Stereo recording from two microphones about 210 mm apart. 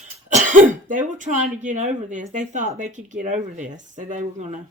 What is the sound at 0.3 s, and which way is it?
Speech, 40° right (ahead or behind).